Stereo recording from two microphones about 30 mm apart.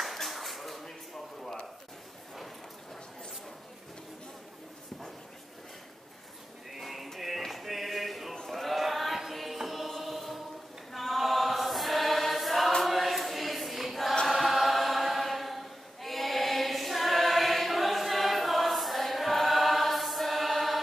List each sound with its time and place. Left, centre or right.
0.0 s clapping: centre
6.8 s music: centre
7.2 s a sound: centre
9.3 s music: centre
10.9 s choir: centre